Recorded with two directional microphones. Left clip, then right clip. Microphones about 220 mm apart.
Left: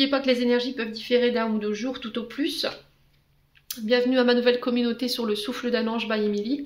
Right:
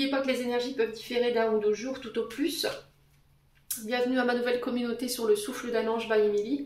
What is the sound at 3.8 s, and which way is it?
Speech, 40° left (ahead or behind).